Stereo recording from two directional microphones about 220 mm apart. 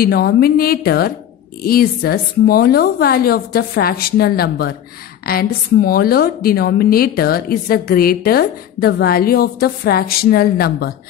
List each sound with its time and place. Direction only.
0.0 s a woman's voice: 45° left (ahead or behind)